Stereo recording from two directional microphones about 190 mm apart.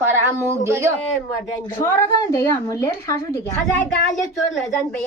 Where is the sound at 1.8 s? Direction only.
15° left (ahead or behind).